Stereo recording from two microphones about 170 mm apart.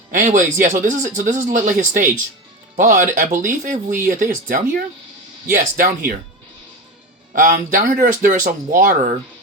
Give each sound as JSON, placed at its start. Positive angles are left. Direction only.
{"t": 0.1, "sound": "speech", "side_deg": -50}
{"t": 7.3, "sound": "speech", "side_deg": -50}